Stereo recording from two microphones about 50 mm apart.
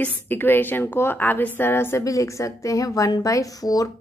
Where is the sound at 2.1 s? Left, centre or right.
Left.